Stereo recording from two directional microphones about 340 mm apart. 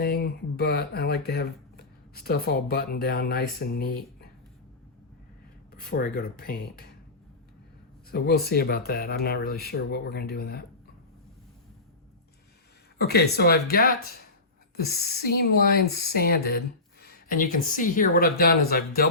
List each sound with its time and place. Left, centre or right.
0.0 s speech: left
5.8 s speech: left
8.1 s speech: left
13.0 s speech: left